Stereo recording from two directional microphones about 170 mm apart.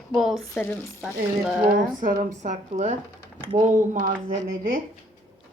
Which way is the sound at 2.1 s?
45° right (ahead or behind).